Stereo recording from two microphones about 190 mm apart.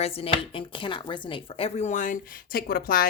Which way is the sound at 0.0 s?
30° left (ahead or behind).